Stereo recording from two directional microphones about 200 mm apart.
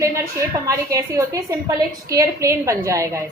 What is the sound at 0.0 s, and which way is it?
A woman's voice, 15° right (ahead or behind).